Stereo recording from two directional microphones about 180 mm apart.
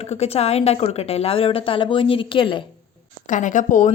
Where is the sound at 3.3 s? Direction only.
45° left (ahead or behind).